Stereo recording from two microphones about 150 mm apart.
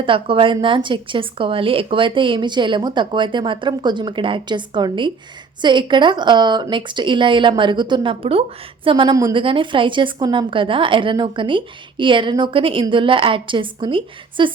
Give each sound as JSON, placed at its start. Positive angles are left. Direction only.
{"t": 0.0, "sound": "a woman's voice", "side_deg": -35}